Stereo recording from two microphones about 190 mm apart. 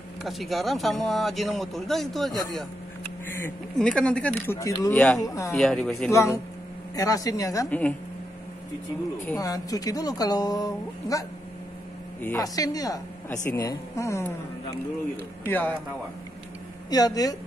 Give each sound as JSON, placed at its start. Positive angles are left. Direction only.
{"t": 0.2, "sound": "speech", "side_deg": 0}
{"t": 3.3, "sound": "speech", "side_deg": 10}
{"t": 4.9, "sound": "speech", "side_deg": 5}
{"t": 5.2, "sound": "speech", "side_deg": 15}
{"t": 5.5, "sound": "speech", "side_deg": 5}
{"t": 6.1, "sound": "speech", "side_deg": 15}
{"t": 9.2, "sound": "speech", "side_deg": 15}
{"t": 15.4, "sound": "speech", "side_deg": 10}
{"t": 16.9, "sound": "speech", "side_deg": 20}